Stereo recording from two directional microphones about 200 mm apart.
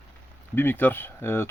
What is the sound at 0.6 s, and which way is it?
Speech, 10° left (ahead or behind).